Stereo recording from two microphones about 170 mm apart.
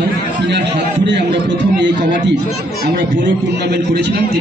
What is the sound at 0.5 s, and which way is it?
A man's voice, 90° right.